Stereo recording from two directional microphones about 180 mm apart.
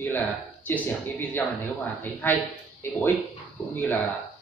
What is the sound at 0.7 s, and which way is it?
A man's voice, 10° left (ahead or behind).